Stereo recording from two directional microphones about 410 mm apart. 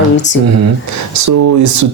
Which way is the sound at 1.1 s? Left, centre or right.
Right.